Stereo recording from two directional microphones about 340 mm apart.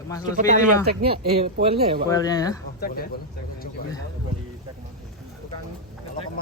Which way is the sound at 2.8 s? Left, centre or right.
Left.